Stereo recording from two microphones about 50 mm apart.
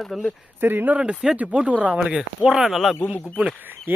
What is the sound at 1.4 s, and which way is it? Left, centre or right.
Speech, right.